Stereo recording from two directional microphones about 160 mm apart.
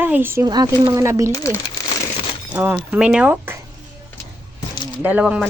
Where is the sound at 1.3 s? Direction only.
20° left (ahead or behind).